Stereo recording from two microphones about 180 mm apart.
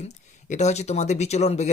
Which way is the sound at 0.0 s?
40° left (ahead or behind).